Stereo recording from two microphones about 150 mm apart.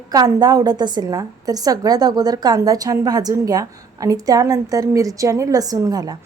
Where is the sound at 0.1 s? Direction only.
25° right (ahead or behind).